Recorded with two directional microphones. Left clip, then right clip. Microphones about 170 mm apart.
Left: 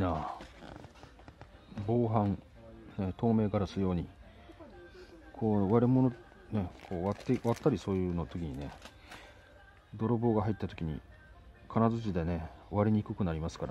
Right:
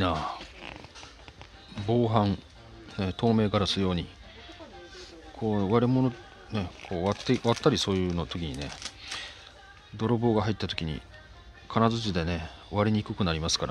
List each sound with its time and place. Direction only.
0.0 s speech: 10° left (ahead or behind)
1.9 s speech: 10° left (ahead or behind)
5.4 s speech: 20° left (ahead or behind)
6.9 s speech: 5° left (ahead or behind)
9.9 s speech: 15° left (ahead or behind)